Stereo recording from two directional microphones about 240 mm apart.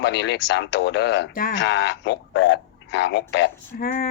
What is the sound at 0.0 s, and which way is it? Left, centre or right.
Speech, left.